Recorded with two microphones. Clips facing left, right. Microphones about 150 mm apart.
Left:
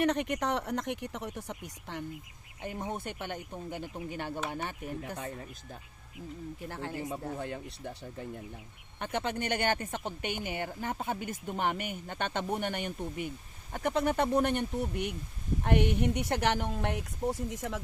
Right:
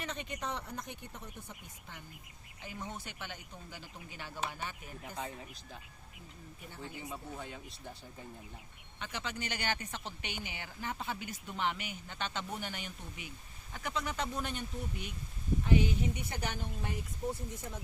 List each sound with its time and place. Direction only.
0.0 s speech: 70° left (ahead or behind)
2.6 s speech: 55° left (ahead or behind)
6.6 s speech: 85° left
7.3 s a woman's voice: 60° left (ahead or behind); by 17.7 s 90° left